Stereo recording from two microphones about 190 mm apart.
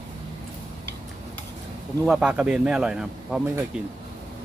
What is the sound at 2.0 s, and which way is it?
A man's voice, 5° right (ahead or behind).